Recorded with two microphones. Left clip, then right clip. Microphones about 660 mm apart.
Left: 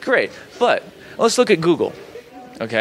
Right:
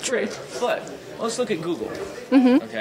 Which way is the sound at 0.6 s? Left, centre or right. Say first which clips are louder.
Left 8 dB; left.